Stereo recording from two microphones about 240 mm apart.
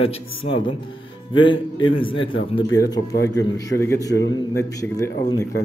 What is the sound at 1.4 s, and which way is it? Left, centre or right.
Speech, centre.